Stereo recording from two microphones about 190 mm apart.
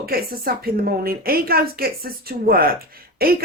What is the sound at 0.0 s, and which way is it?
Speech, 50° right (ahead or behind).